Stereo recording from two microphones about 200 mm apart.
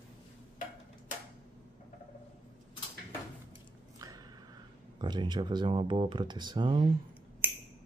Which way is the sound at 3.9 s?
20° right (ahead or behind).